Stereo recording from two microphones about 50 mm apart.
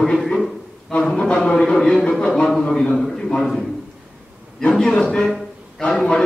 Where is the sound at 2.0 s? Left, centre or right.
Left.